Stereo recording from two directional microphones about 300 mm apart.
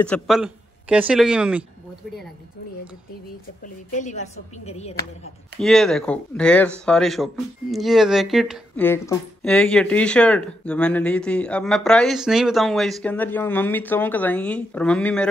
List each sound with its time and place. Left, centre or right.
0.0 s speech: centre
3.6 s speech: left
5.6 s speech: centre